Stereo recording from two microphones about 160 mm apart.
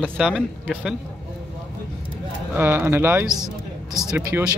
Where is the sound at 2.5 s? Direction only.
15° right (ahead or behind).